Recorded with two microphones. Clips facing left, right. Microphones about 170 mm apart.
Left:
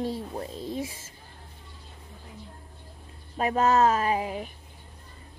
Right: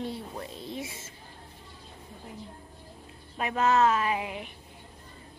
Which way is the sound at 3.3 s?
35° left (ahead or behind).